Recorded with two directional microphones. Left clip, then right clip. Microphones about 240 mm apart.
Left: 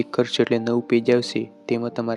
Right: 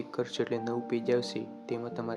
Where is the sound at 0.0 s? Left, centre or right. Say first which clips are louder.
Left 12 dB; left.